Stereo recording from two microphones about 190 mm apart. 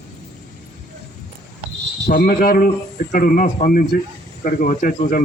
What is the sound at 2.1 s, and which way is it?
A man's voice, 50° left (ahead or behind).